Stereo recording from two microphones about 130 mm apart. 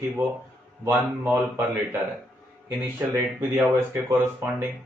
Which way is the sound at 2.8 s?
15° right (ahead or behind).